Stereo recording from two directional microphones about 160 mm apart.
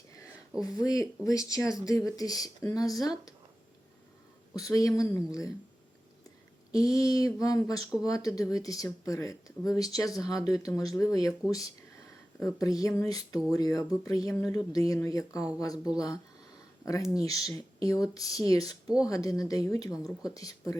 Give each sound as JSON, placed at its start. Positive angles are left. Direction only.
{"t": 0.6, "sound": "speech", "side_deg": 20}
{"t": 4.5, "sound": "speech", "side_deg": 20}
{"t": 6.7, "sound": "speech", "side_deg": 20}